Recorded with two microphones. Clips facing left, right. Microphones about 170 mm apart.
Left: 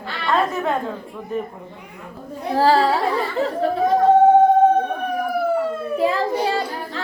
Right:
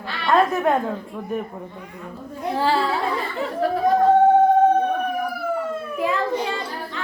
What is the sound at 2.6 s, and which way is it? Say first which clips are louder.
Speech: left 5 dB; 40° left (ahead or behind).